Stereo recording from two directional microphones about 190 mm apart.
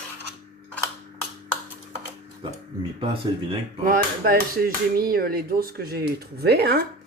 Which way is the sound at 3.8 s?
50° right (ahead or behind).